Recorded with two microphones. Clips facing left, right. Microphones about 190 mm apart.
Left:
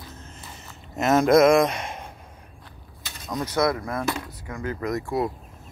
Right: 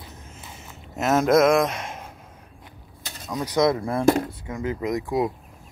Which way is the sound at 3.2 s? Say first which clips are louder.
Right 2 dB; 10° right (ahead or behind).